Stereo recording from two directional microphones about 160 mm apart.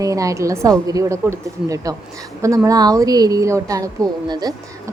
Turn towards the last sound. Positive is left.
turn(degrees=-25)  # may be behind; listen again after turning